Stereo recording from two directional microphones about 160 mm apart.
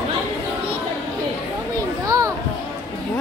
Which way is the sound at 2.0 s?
20° right (ahead or behind).